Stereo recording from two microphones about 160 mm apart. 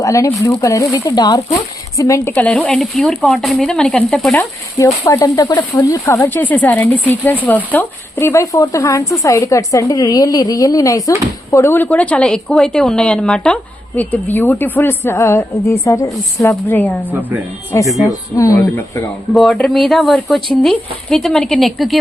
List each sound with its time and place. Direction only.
0.0 s speech: 20° left (ahead or behind)
2.3 s speech: 5° left (ahead or behind)
4.8 s speech: 20° left (ahead or behind)
17.1 s speech: 10° right (ahead or behind)
18.0 s speech: 20° left (ahead or behind)
19.3 s speech: centre (ahead or behind)